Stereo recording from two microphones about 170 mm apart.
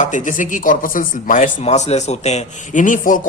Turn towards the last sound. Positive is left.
turn(degrees=50)  # may be behind; listen again after turning